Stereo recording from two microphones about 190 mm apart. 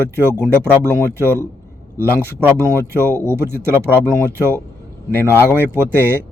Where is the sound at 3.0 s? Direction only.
10° left (ahead or behind).